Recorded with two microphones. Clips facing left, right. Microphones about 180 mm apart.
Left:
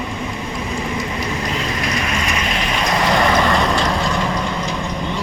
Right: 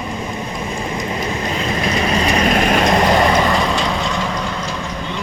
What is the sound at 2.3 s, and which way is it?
Vehicle, 40° right (ahead or behind).